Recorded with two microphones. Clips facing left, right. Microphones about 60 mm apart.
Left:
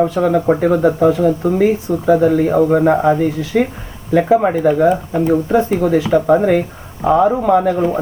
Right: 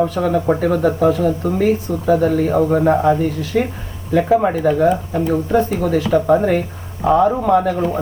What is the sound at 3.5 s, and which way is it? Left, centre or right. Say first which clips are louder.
Speech: left 3 dB; left.